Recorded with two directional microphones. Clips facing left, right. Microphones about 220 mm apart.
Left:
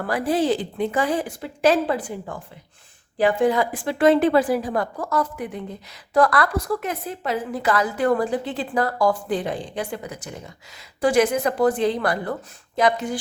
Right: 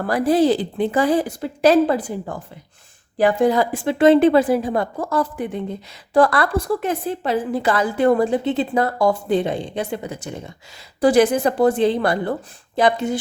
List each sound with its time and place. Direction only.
0.1 s a woman's voice: 40° right (ahead or behind)